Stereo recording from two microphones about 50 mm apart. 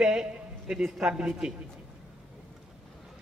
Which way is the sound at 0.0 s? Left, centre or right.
Centre.